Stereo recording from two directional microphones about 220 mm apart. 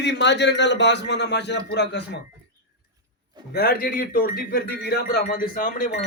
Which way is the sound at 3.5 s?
45° left (ahead or behind).